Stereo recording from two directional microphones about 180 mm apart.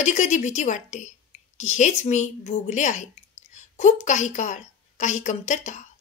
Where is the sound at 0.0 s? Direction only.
40° left (ahead or behind).